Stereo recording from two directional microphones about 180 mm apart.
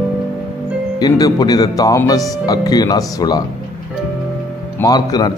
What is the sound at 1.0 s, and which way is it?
Speech, 20° left (ahead or behind).